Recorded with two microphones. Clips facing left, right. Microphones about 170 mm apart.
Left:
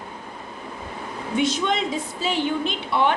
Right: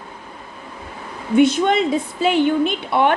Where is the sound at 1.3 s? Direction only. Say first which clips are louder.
Right 8 dB; 55° right (ahead or behind).